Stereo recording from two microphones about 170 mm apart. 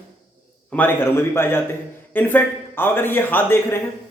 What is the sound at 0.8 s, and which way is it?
A man's voice, 10° left (ahead or behind).